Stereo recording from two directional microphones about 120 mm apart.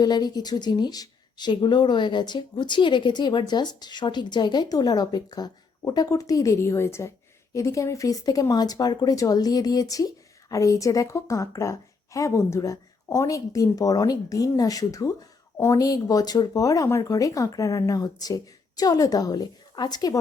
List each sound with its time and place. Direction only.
0.0 s a woman's voice: 35° left (ahead or behind)